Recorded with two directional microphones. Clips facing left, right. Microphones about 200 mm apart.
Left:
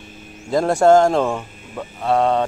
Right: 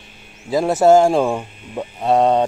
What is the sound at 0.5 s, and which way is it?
Speech, 5° right (ahead or behind).